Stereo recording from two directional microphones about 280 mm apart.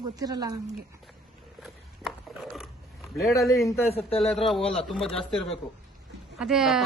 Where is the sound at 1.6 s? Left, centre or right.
Centre.